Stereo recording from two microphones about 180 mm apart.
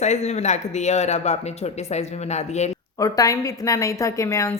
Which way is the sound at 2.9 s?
20° left (ahead or behind).